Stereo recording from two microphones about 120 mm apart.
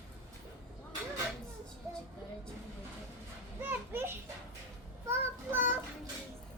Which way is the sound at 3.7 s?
20° right (ahead or behind).